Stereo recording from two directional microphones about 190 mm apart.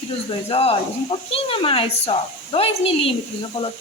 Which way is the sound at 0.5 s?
30° left (ahead or behind).